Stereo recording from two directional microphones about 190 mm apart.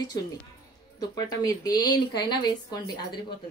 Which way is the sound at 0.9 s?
20° left (ahead or behind).